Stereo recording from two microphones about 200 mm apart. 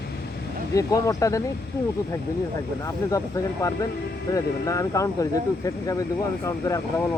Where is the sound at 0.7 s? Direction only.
15° left (ahead or behind).